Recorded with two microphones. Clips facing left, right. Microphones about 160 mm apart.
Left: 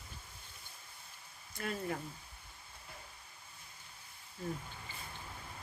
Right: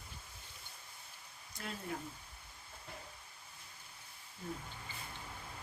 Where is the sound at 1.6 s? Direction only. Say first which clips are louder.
Left 6 dB; 65° left (ahead or behind).